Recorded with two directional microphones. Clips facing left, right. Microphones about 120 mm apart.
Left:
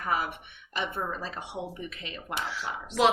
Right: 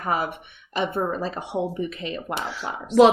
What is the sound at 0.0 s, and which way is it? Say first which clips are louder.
Speech: right 5 dB; 40° right (ahead or behind).